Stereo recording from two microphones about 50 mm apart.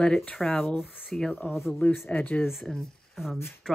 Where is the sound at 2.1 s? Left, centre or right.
Left.